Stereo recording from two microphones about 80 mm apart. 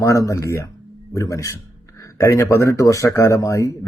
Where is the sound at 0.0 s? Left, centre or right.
Left.